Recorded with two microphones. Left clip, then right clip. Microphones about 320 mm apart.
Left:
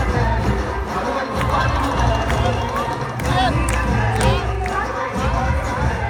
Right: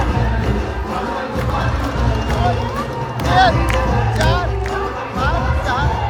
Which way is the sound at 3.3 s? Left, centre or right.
Centre.